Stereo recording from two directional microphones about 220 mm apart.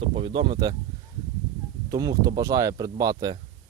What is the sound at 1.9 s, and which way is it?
Speech, 15° right (ahead or behind).